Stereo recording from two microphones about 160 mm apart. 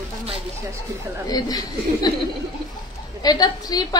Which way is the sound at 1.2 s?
25° left (ahead or behind).